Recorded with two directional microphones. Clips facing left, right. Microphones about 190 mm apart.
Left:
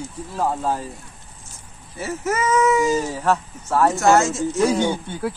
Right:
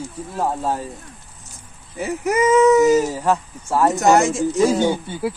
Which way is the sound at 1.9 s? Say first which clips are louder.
Right 4 dB; 15° right (ahead or behind).